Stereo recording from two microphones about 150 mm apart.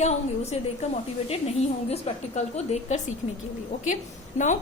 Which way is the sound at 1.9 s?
50° left (ahead or behind).